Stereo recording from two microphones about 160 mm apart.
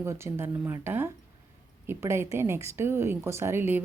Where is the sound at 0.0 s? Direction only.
15° right (ahead or behind).